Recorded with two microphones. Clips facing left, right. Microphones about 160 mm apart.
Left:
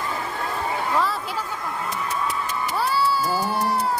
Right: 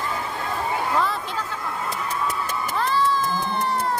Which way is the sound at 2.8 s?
10° left (ahead or behind).